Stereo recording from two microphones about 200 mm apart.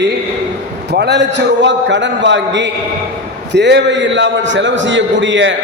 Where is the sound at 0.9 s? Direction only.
60° right (ahead or behind).